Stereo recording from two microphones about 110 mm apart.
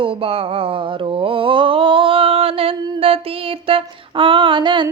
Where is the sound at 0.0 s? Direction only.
55° right (ahead or behind).